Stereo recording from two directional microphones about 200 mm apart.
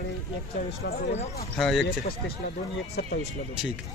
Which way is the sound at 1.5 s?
Centre (ahead or behind).